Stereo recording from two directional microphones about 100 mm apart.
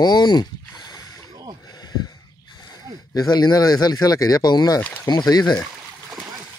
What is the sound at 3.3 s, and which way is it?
Speech, 45° left (ahead or behind).